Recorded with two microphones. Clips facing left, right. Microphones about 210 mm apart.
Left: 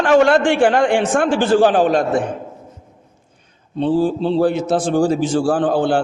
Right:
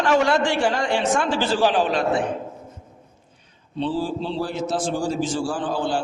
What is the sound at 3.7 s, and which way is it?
A man's voice, 50° left (ahead or behind).